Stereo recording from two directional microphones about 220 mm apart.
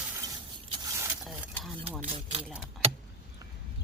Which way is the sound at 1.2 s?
Centre (ahead or behind).